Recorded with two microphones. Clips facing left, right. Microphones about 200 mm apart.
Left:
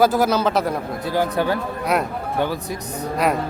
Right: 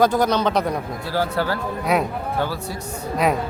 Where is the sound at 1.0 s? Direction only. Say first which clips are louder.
Left 2 dB; 20° left (ahead or behind).